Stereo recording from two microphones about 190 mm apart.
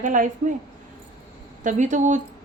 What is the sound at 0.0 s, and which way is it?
Speech, 45° right (ahead or behind).